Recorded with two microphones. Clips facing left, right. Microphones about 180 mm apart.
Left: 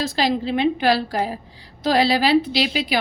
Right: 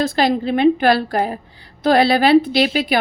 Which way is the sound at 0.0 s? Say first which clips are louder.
Right 4 dB; 55° right (ahead or behind).